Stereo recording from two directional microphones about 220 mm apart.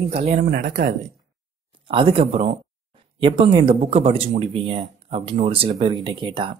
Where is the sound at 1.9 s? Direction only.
25° right (ahead or behind).